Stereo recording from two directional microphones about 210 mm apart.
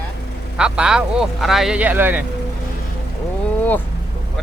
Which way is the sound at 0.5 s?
5° right (ahead or behind).